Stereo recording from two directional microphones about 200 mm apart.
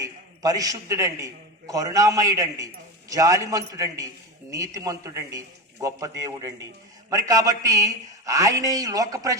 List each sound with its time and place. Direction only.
0.0 s a man's voice: 20° right (ahead or behind)